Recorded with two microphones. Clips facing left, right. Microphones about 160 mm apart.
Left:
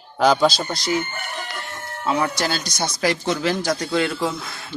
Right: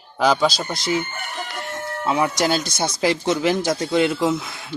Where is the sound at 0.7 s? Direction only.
20° right (ahead or behind).